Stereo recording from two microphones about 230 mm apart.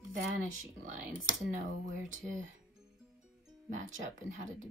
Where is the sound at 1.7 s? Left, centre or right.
Right.